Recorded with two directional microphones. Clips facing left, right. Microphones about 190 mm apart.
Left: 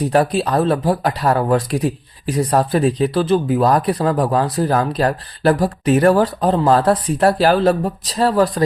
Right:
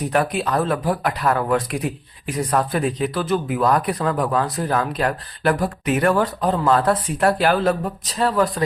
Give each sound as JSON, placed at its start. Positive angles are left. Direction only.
{"t": 0.1, "sound": "speech", "side_deg": 30}